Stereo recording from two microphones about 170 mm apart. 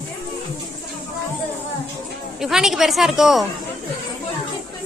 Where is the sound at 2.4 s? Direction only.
Centre (ahead or behind).